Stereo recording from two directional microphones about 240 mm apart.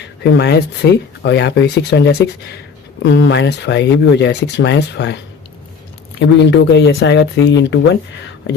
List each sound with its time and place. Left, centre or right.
0.0 s speech: left
6.1 s speech: left